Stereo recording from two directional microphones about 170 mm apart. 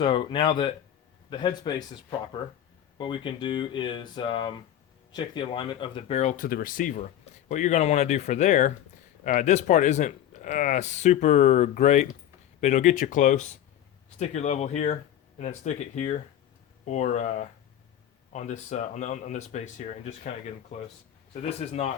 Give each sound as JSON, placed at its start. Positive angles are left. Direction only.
{"t": 0.0, "sound": "speech", "side_deg": 30}
{"t": 21.6, "sound": "speech", "side_deg": 40}